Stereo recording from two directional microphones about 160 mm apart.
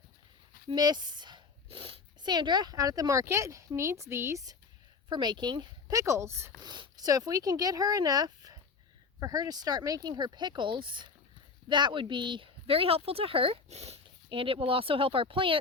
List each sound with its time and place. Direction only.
0.7 s speech: 25° right (ahead or behind)